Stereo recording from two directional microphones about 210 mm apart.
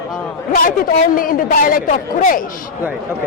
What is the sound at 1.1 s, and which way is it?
A man's voice, 40° left (ahead or behind).